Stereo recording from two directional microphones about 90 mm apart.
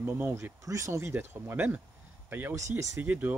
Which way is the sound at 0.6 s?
35° right (ahead or behind).